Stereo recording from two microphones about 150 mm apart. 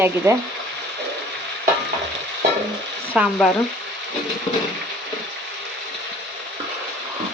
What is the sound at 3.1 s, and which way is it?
Speech, 5° right (ahead or behind).